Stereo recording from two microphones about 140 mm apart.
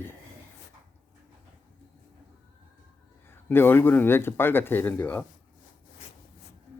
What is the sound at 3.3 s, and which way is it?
Speech, 15° left (ahead or behind).